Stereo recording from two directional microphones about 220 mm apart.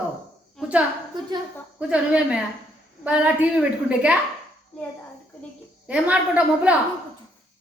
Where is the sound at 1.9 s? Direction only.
5° right (ahead or behind).